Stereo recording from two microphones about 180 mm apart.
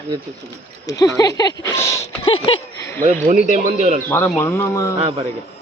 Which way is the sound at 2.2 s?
30° left (ahead or behind).